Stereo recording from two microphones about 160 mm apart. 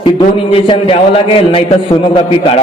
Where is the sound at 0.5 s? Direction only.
35° left (ahead or behind).